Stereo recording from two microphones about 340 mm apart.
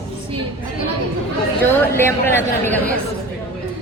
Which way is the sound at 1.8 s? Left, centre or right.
Centre.